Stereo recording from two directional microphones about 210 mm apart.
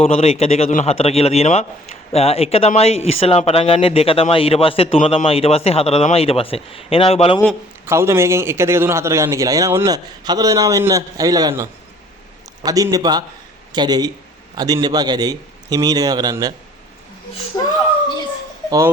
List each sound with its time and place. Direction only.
0.0 s speech: 30° left (ahead or behind)
7.9 s a man's voice: 10° right (ahead or behind)